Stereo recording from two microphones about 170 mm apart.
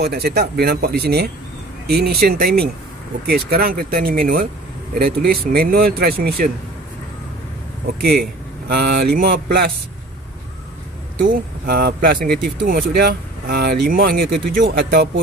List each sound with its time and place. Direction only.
0.0 s speech: 75° right (ahead or behind)
7.8 s speech: 65° right (ahead or behind)
11.2 s speech: 65° right (ahead or behind)